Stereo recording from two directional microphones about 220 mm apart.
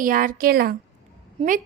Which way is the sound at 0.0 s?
40° right (ahead or behind).